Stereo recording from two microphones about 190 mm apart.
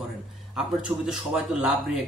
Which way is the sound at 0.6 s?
5° right (ahead or behind).